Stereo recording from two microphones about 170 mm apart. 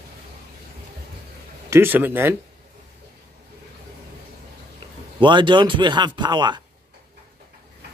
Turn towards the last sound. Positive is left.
turn(degrees=-25)  # may be behind; listen again after turning